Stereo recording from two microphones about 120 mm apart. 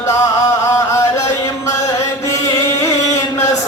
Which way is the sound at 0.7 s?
25° left (ahead or behind).